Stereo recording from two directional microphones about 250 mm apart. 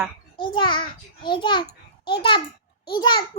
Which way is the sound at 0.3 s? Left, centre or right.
Centre.